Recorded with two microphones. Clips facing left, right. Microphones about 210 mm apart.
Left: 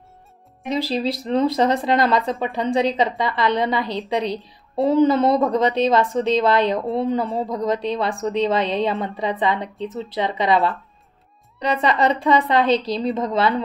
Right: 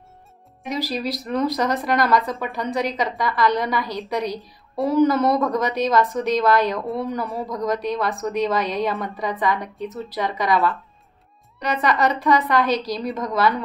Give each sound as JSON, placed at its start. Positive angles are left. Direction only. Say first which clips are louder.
{"t": 0.7, "sound": "a woman's voice", "louder": "left 3 dB", "side_deg": 30}
{"t": 11.7, "sound": "a woman's voice", "louder": "left 1 dB", "side_deg": 25}